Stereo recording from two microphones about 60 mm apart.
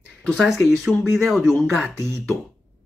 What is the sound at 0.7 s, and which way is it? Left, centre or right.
Speech, centre.